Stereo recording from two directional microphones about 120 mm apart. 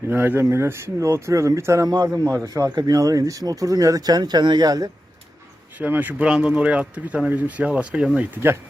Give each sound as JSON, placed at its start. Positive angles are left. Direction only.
{"t": 0.1, "sound": "speech", "side_deg": -15}
{"t": 5.8, "sound": "speech", "side_deg": -15}